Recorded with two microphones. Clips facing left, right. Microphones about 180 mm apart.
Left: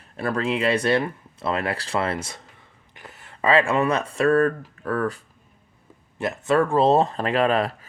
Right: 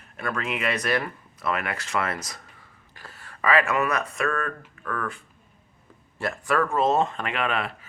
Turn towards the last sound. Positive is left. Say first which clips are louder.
# left 7 dB
turn(degrees=40)  # may be behind; listen again after turning